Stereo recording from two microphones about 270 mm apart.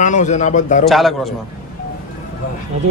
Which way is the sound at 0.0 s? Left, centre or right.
Left.